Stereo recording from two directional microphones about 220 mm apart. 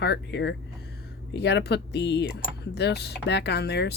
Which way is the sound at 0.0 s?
50° left (ahead or behind).